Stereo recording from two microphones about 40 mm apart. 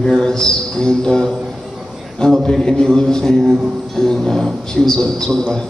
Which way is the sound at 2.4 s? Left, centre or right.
Centre.